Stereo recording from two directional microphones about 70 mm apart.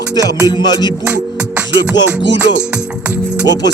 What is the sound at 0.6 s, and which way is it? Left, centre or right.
Music, left.